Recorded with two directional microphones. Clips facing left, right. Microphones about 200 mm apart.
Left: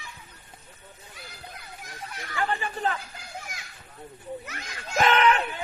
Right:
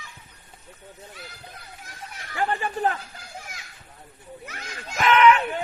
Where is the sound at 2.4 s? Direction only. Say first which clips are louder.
Right 3 dB; 45° right (ahead or behind).